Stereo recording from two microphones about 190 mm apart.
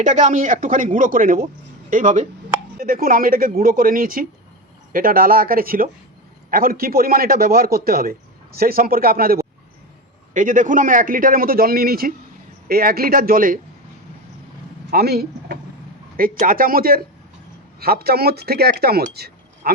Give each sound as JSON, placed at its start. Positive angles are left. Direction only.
{"t": 0.0, "sound": "speech", "side_deg": -40}
{"t": 14.8, "sound": "speech", "side_deg": -55}